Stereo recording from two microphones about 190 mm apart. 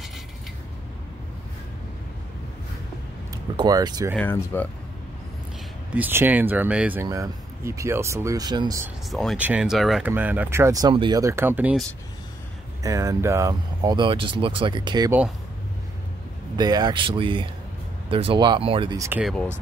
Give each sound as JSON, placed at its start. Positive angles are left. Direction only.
{"t": 3.5, "sound": "speech", "side_deg": -20}
{"t": 4.2, "sound": "speech", "side_deg": 10}
{"t": 5.9, "sound": "speech", "side_deg": -10}
{"t": 9.1, "sound": "speech", "side_deg": 0}
{"t": 12.8, "sound": "speech", "side_deg": -15}
{"t": 16.5, "sound": "speech", "side_deg": -20}
{"t": 18.9, "sound": "speech", "side_deg": -15}
{"t": 19.2, "sound": "speech", "side_deg": 5}